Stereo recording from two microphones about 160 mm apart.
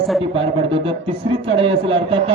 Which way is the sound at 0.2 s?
35° right (ahead or behind).